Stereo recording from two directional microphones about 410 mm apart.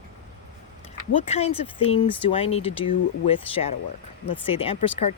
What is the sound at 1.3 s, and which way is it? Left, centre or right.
Speech, centre.